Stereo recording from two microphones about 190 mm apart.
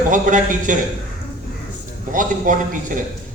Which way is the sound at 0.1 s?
40° right (ahead or behind).